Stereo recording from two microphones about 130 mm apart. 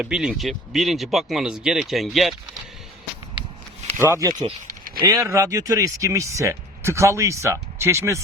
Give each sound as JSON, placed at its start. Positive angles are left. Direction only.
{"t": 0.0, "sound": "speech", "side_deg": -5}
{"t": 3.9, "sound": "speech", "side_deg": -20}